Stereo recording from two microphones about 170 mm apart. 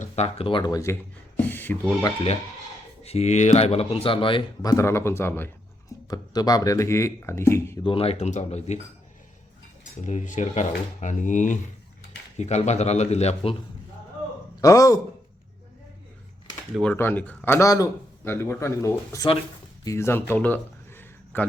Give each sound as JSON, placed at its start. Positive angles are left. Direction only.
{"t": 0.0, "sound": "speech", "side_deg": 35}
{"t": 3.0, "sound": "speech", "side_deg": 40}
{"t": 7.9, "sound": "speech", "side_deg": 35}
{"t": 10.0, "sound": "speech", "side_deg": 45}
{"t": 14.6, "sound": "speech", "side_deg": 20}
{"t": 16.7, "sound": "speech", "side_deg": 10}
{"t": 19.8, "sound": "a sound", "side_deg": 15}